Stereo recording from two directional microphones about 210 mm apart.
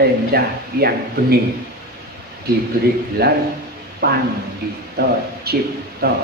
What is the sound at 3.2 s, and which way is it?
Speech, 50° right (ahead or behind).